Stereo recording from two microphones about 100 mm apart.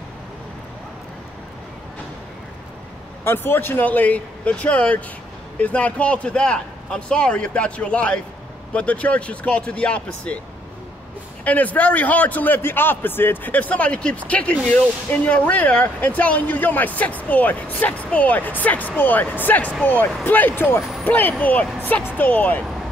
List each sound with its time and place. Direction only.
3.3 s a man's voice: 20° left (ahead or behind)
11.4 s a man's voice: 15° left (ahead or behind)